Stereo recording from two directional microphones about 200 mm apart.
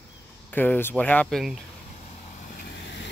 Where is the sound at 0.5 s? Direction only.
10° left (ahead or behind).